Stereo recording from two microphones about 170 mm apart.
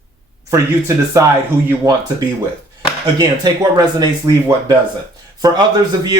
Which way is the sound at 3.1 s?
20° right (ahead or behind).